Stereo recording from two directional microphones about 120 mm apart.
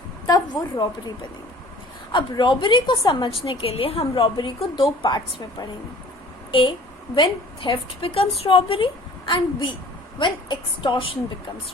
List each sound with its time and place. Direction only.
0.5 s a woman's voice: 35° left (ahead or behind)
2.1 s a woman's voice: 40° left (ahead or behind)